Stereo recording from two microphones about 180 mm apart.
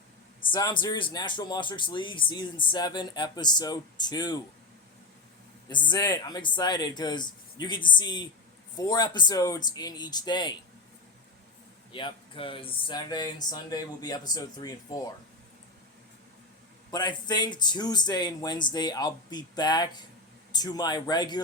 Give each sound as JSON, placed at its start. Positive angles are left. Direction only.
{"t": 0.5, "sound": "speech", "side_deg": 25}
{"t": 5.6, "sound": "speech", "side_deg": 25}
{"t": 11.9, "sound": "speech", "side_deg": 30}
{"t": 16.9, "sound": "speech", "side_deg": 25}